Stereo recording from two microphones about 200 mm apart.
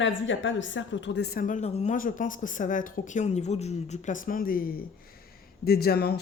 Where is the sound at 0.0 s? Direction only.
70° left (ahead or behind).